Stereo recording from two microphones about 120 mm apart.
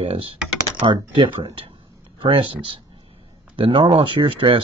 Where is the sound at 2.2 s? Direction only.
45° right (ahead or behind).